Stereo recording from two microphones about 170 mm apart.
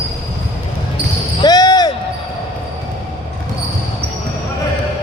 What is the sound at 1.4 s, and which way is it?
Basketball bounce, 25° left (ahead or behind).